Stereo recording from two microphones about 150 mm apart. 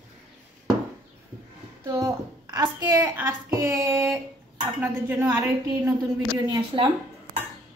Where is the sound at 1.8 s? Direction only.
20° right (ahead or behind).